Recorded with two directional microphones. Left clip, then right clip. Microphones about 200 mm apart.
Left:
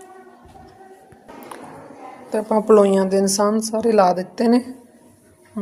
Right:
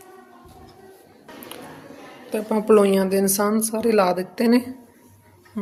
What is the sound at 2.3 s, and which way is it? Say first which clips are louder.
A woman's voice: left 3 dB; centre (ahead or behind).